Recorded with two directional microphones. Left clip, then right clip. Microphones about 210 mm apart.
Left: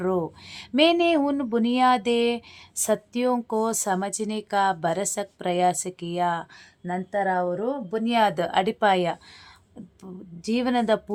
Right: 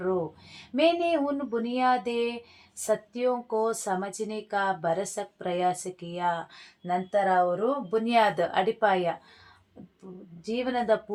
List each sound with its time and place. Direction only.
0.0 s speech: 35° left (ahead or behind)
10.4 s speech: 40° left (ahead or behind)